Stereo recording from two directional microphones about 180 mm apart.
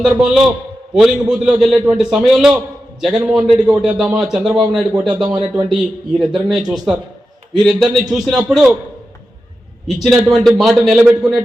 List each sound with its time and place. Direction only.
0.0 s a man's voice: 5° right (ahead or behind)
5.0 s speech: 25° right (ahead or behind)
6.1 s a man's voice: centre (ahead or behind)
9.8 s a man's voice: centre (ahead or behind)